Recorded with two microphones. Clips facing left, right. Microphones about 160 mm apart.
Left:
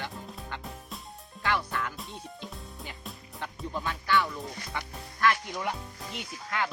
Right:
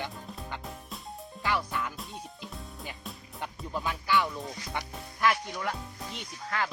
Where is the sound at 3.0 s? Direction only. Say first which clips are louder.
Left 1 dB; centre (ahead or behind).